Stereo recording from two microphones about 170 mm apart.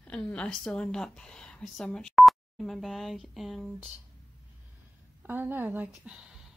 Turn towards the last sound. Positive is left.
turn(degrees=-10)  # may be behind; listen again after turning